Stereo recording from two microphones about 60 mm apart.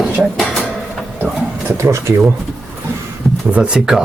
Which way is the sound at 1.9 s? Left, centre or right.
Right.